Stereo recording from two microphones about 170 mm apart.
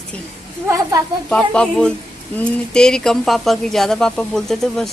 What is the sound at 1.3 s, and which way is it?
Speech, 5° left (ahead or behind).